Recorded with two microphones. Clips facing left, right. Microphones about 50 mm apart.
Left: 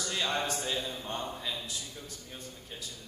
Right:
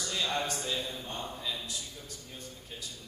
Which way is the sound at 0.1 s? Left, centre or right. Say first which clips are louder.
Left 1 dB; left.